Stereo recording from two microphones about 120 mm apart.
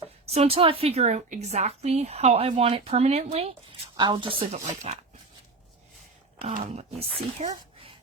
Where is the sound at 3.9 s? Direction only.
40° right (ahead or behind).